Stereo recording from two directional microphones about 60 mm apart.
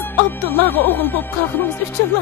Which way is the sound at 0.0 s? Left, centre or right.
Left.